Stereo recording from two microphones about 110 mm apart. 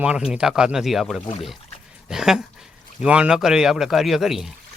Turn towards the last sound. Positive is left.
turn(degrees=0)  # may be behind; listen again after turning